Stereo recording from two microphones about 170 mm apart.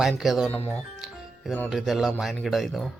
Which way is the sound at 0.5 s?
10° left (ahead or behind).